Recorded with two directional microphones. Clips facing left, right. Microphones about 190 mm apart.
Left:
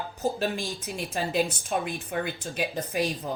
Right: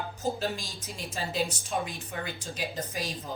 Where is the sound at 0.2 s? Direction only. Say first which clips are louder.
Left 4 dB; 60° left (ahead or behind).